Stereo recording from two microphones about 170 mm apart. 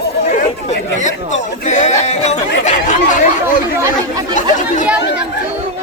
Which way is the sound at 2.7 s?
50° left (ahead or behind).